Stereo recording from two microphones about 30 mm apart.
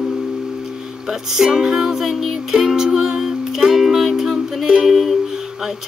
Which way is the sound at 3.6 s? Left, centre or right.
Centre.